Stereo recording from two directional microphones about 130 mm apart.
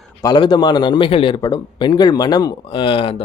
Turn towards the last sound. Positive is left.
turn(degrees=45)  # may be behind; listen again after turning